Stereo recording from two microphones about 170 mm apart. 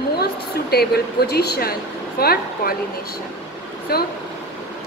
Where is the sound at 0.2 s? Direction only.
70° left (ahead or behind).